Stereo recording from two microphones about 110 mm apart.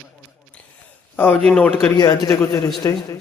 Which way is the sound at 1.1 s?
15° left (ahead or behind).